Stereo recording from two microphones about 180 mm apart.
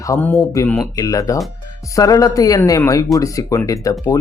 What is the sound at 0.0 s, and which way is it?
Speech, 15° left (ahead or behind).